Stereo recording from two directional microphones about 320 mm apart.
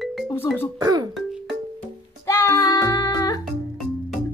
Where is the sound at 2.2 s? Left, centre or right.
Centre.